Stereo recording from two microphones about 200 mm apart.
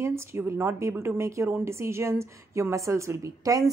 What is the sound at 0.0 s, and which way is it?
A woman's voice, 15° right (ahead or behind).